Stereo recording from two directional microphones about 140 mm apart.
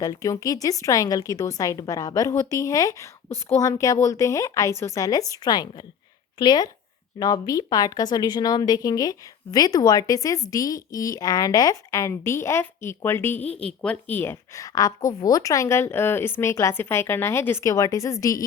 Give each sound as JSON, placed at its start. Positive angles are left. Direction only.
{"t": 0.0, "sound": "speech", "side_deg": 25}